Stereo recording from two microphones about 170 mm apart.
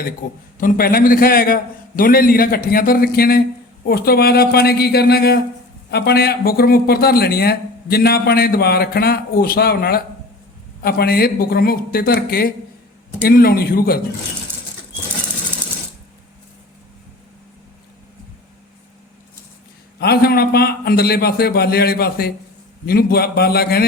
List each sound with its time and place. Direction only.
0.6 s a man's voice: 55° left (ahead or behind)
20.0 s a man's voice: 65° left (ahead or behind)